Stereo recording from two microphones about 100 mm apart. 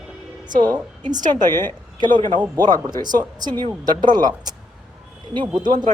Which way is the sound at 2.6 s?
40° right (ahead or behind).